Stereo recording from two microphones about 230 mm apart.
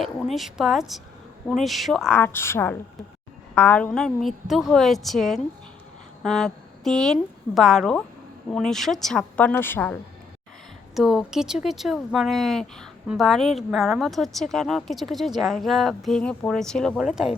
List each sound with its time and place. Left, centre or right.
0.0 s a woman's voice: centre